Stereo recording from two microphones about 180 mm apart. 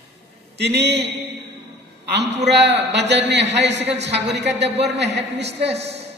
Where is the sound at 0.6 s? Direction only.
70° right (ahead or behind).